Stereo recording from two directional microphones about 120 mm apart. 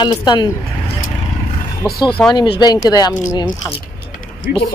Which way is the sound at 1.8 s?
35° left (ahead or behind).